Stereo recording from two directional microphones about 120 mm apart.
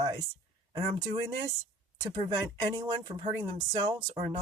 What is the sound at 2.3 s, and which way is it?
Speech, 35° right (ahead or behind).